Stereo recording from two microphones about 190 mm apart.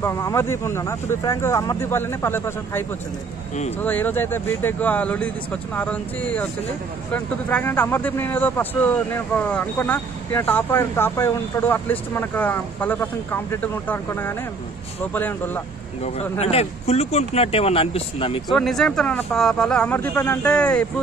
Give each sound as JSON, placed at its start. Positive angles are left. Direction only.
{"t": 0.0, "sound": "speech", "side_deg": 15}
{"t": 3.8, "sound": "speech", "side_deg": 10}
{"t": 16.0, "sound": "speech", "side_deg": 35}
{"t": 18.5, "sound": "speech", "side_deg": 0}